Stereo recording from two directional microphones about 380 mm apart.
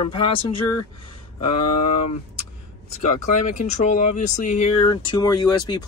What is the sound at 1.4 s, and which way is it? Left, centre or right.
Speech, left.